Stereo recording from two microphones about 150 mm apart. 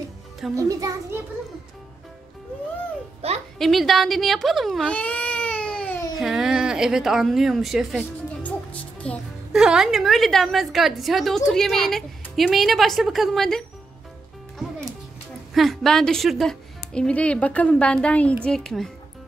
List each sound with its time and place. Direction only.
0.6 s a child's voice: 25° right (ahead or behind)
3.2 s a woman's voice: 40° right (ahead or behind)
3.5 s a woman's voice: centre (ahead or behind)
9.0 s a child's voice: 5° left (ahead or behind)
9.5 s a woman's voice: 5° right (ahead or behind)
15.5 s a woman's voice: centre (ahead or behind)